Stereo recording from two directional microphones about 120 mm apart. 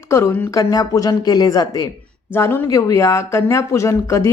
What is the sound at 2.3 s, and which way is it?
A woman's voice, 20° left (ahead or behind).